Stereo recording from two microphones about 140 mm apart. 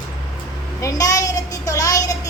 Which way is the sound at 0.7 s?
25° left (ahead or behind).